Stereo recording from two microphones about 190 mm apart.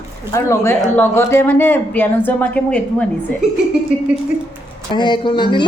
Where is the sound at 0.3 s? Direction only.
15° left (ahead or behind).